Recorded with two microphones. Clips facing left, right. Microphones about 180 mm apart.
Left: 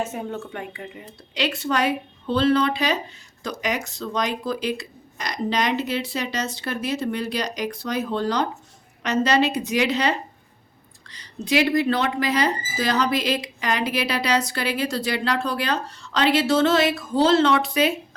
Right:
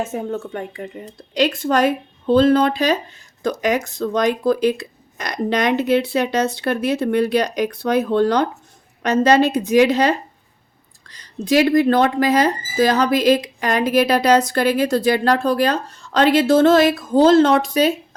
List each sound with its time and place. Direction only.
0.1 s a woman's voice: 40° right (ahead or behind)